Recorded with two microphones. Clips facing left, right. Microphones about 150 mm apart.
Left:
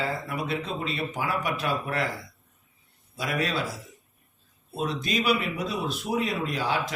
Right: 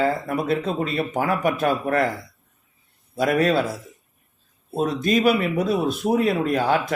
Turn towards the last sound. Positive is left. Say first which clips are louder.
# right 8 dB
turn(degrees=-55)  # may be behind; listen again after turning